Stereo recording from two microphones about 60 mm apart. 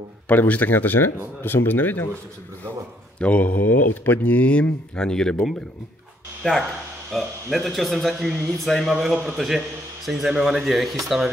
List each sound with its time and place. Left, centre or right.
0.3 s speech: left
3.2 s speech: left
6.4 s speech: centre
7.1 s speech: centre